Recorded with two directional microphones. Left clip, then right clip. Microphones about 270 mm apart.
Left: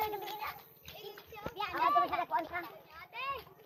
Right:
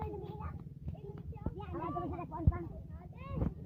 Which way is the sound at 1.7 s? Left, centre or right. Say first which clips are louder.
Left 12 dB; left.